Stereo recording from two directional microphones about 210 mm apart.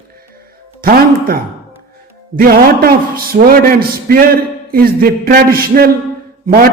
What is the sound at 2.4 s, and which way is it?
Speech, 45° right (ahead or behind).